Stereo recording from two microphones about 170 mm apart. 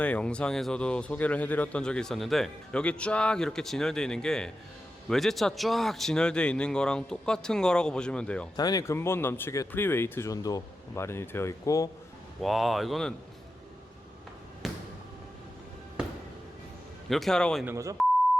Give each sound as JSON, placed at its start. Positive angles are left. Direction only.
{"t": 0.0, "sound": "a man's voice", "side_deg": 5}
{"t": 8.5, "sound": "speech", "side_deg": 20}
{"t": 12.4, "sound": "a man's voice", "side_deg": 0}
{"t": 14.6, "sound": "a sound", "side_deg": 0}
{"t": 17.1, "sound": "a man's voice", "side_deg": 0}
{"t": 17.7, "sound": "speech", "side_deg": -20}